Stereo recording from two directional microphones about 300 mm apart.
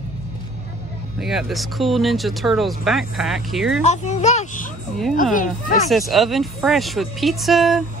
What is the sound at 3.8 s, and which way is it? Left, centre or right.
Speech, left.